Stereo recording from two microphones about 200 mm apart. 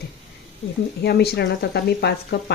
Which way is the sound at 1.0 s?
55° left (ahead or behind).